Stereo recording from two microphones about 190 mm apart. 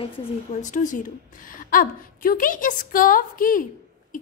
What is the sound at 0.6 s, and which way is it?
A woman's voice, 40° left (ahead or behind).